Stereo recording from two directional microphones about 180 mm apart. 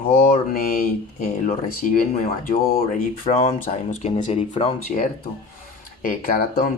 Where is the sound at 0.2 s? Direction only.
50° left (ahead or behind).